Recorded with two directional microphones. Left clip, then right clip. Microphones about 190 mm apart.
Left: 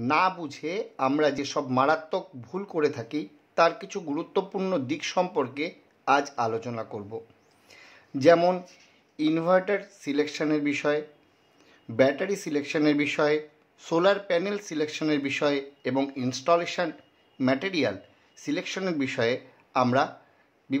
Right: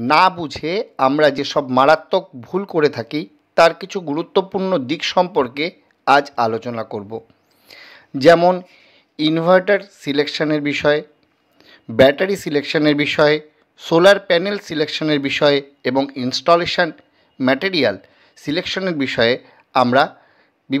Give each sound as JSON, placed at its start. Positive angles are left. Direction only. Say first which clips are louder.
{"t": 0.0, "sound": "speech", "louder": "right 10 dB", "side_deg": -35}